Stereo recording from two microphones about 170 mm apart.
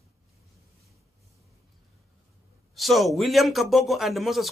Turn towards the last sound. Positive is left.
turn(degrees=0)  # may be behind; listen again after turning